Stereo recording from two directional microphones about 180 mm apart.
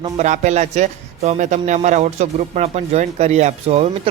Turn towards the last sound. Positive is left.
turn(degrees=-35)  # may be behind; listen again after turning